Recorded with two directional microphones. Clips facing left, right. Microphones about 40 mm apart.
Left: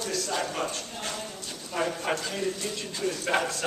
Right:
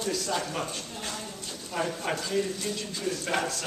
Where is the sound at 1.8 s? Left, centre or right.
Centre.